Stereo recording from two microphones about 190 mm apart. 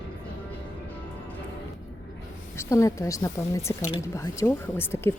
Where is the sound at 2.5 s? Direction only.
15° left (ahead or behind).